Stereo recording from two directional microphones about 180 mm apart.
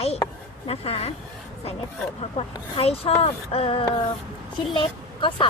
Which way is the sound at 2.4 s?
35° left (ahead or behind).